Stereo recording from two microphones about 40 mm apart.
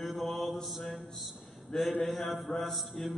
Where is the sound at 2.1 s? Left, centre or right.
Centre.